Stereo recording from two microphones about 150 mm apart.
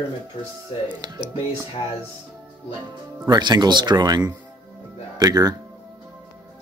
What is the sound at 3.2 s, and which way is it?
A man's voice, 30° right (ahead or behind).